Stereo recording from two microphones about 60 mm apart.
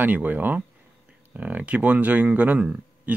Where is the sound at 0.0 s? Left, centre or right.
Right.